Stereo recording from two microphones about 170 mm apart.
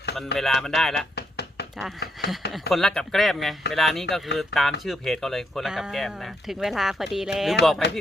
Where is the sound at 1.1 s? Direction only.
80° left.